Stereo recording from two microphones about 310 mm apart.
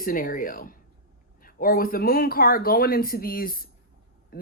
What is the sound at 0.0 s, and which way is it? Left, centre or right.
Speech, left.